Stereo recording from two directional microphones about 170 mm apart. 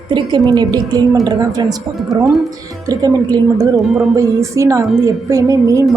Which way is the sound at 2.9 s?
25° right (ahead or behind).